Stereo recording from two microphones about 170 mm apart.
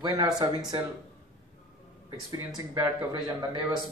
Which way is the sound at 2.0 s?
20° right (ahead or behind).